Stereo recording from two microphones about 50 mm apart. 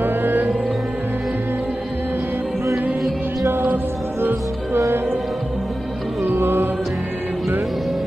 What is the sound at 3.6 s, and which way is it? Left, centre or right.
Music, right.